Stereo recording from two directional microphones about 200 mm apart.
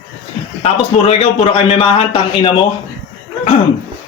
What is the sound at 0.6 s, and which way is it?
A man's voice, 30° left (ahead or behind).